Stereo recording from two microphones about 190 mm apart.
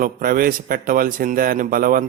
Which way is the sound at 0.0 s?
50° right (ahead or behind).